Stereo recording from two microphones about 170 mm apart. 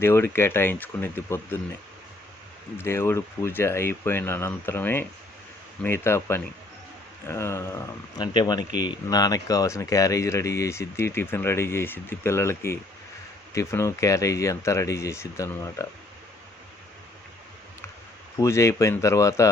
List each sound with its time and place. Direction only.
0.0 s speech: 15° left (ahead or behind)
2.7 s speech: 15° left (ahead or behind)
8.4 s speech: 25° left (ahead or behind)
18.3 s speech: 15° left (ahead or behind)